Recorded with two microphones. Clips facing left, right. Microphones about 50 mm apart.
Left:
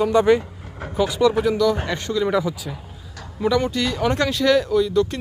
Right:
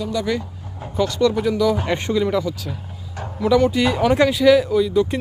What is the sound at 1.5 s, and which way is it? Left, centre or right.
Speech, centre.